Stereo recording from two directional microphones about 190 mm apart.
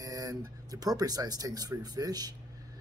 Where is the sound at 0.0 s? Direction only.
20° right (ahead or behind).